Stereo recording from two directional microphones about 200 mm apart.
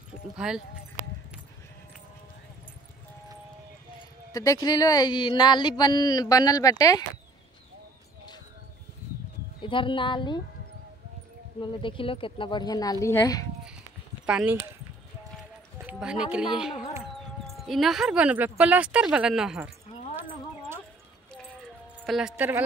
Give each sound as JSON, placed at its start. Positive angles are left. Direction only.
{"t": 0.4, "sound": "speech", "side_deg": -5}
{"t": 4.3, "sound": "speech", "side_deg": 15}
{"t": 9.6, "sound": "a woman's voice", "side_deg": 25}
{"t": 11.6, "sound": "speech", "side_deg": 25}
{"t": 14.2, "sound": "speech", "side_deg": -5}
{"t": 15.8, "sound": "speech", "side_deg": -5}
{"t": 20.2, "sound": "clip-clop", "side_deg": -10}
{"t": 22.0, "sound": "speech", "side_deg": 0}
{"t": 22.3, "sound": "speech", "side_deg": -10}